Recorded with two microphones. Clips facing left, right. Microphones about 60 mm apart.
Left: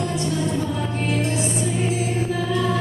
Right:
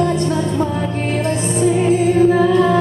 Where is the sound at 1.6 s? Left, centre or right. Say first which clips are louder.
Right 10 dB; right.